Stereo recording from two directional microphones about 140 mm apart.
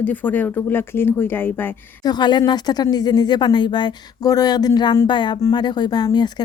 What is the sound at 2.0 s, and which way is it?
A woman's voice, 30° left (ahead or behind).